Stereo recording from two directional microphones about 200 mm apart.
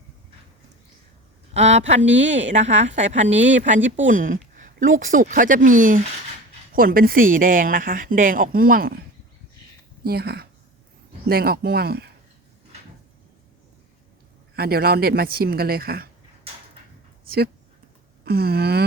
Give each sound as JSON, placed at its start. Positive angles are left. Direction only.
{"t": 1.5, "sound": "a woman's voice", "side_deg": -35}
{"t": 10.0, "sound": "a woman's voice", "side_deg": -50}
{"t": 14.5, "sound": "a woman's voice", "side_deg": -50}
{"t": 17.2, "sound": "a woman's voice", "side_deg": -50}